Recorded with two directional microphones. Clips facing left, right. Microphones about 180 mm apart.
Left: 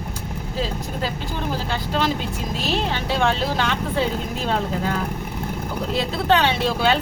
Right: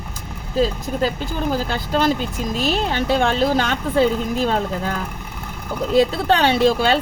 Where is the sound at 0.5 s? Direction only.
45° right (ahead or behind).